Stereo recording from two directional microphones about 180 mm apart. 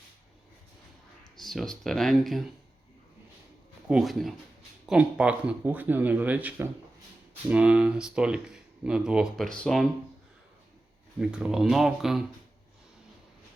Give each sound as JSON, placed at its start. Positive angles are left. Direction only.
{"t": 1.4, "sound": "speech", "side_deg": 0}
{"t": 3.8, "sound": "speech", "side_deg": 0}
{"t": 11.2, "sound": "speech", "side_deg": -5}